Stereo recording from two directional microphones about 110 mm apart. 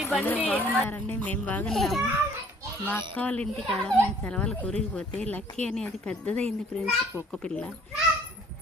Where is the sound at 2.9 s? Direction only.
15° left (ahead or behind).